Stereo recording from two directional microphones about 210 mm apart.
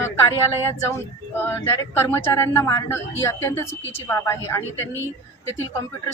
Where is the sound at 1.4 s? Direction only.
10° left (ahead or behind).